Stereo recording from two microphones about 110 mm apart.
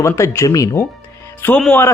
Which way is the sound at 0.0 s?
25° left (ahead or behind).